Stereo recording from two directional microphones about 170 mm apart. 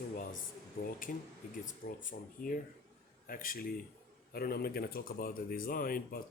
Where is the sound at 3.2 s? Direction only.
55° left (ahead or behind).